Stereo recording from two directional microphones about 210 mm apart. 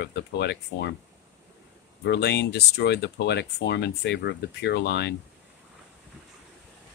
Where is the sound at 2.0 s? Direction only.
55° left (ahead or behind).